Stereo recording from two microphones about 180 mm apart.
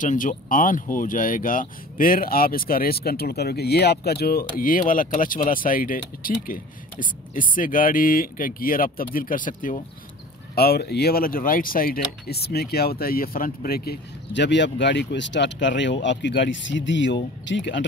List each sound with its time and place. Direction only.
0.0 s speech: 45° left (ahead or behind)
10.5 s speech: 60° left (ahead or behind); by 17.8 s 80° left